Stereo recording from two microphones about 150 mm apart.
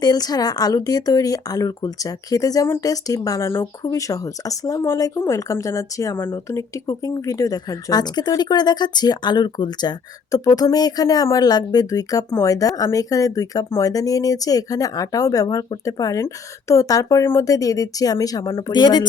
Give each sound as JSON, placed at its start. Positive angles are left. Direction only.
{"t": 0.0, "sound": "speech", "side_deg": 25}